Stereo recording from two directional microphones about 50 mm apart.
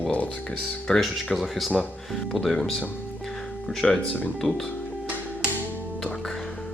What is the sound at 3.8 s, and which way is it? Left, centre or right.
Speech, centre.